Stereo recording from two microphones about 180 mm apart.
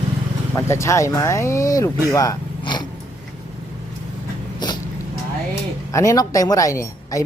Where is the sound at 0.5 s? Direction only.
15° left (ahead or behind).